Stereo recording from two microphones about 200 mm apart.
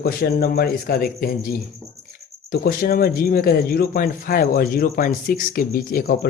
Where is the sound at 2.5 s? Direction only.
45° left (ahead or behind).